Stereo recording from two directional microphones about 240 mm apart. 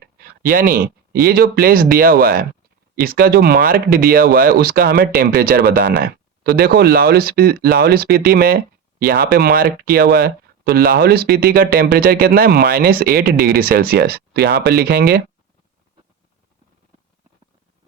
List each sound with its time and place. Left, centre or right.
0.0 s speech: right